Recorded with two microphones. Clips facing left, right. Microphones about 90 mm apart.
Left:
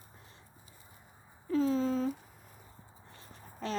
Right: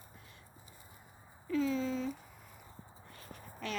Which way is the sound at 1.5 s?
40° left (ahead or behind).